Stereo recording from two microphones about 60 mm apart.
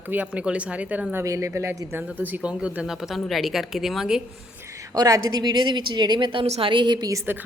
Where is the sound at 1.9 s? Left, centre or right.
Right.